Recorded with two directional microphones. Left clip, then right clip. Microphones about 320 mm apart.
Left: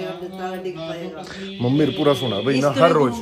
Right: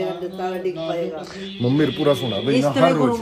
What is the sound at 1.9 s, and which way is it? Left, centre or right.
Speech, left.